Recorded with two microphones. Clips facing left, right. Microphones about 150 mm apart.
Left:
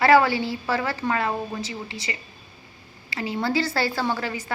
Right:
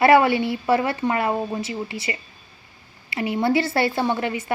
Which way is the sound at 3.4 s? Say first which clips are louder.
Right 4 dB; 25° right (ahead or behind).